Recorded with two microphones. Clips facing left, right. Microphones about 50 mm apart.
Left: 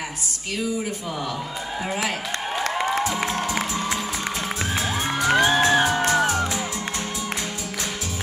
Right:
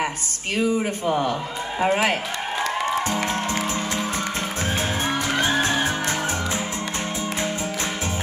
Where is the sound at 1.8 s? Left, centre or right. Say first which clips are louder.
Right 7 dB; right.